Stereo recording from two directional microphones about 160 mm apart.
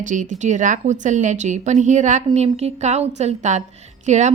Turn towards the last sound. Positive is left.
turn(degrees=-45)  # may be behind; listen again after turning